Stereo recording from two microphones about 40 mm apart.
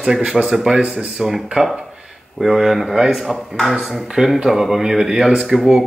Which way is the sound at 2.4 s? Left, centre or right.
Centre.